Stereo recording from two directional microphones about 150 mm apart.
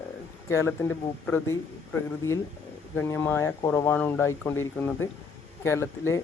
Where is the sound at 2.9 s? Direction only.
15° left (ahead or behind).